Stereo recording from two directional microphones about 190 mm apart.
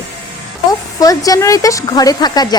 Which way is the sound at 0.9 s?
20° left (ahead or behind).